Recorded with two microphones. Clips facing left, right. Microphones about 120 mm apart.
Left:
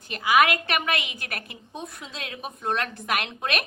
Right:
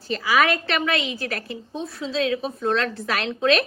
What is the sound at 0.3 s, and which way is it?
A woman's voice, 15° left (ahead or behind).